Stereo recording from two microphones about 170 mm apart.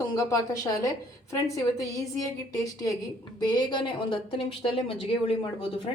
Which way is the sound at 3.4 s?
25° left (ahead or behind).